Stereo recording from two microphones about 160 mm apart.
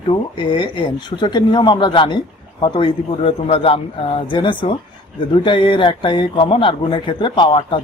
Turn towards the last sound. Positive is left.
turn(degrees=30)  # may be behind; listen again after turning